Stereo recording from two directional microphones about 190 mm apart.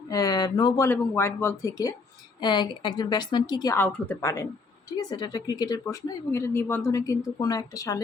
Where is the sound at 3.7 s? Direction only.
10° left (ahead or behind).